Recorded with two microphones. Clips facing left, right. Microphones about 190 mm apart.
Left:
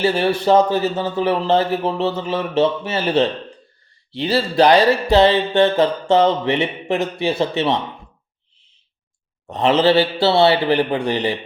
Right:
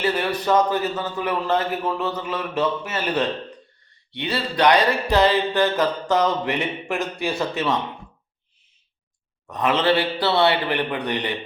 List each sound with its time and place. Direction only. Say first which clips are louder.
0.0 s speech: left 5 dB; 25° left (ahead or behind)
9.5 s speech: left 5 dB; 30° left (ahead or behind)